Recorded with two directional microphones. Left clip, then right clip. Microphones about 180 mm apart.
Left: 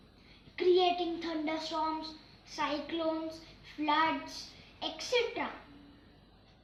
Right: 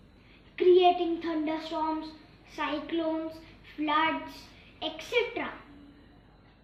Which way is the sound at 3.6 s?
25° left (ahead or behind).